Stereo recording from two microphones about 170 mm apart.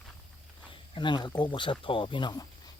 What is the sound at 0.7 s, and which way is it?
Speech, 30° left (ahead or behind).